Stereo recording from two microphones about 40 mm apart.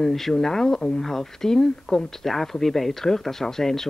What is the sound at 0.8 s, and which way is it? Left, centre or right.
Speech, left.